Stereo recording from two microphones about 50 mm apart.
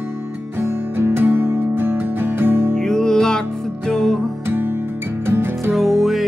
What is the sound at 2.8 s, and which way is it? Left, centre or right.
Music, centre.